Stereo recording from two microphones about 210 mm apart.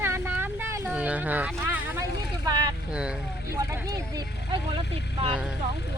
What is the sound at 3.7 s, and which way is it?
Speech, 20° right (ahead or behind).